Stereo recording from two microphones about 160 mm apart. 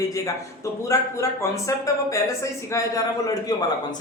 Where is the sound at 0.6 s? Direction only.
20° left (ahead or behind).